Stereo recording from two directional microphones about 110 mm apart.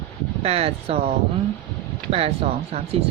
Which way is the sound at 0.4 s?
65° right (ahead or behind).